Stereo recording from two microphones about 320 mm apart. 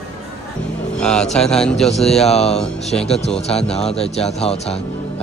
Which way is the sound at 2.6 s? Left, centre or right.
Centre.